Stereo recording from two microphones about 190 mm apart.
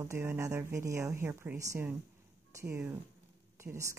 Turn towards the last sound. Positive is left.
turn(degrees=-15)  # may be behind; listen again after turning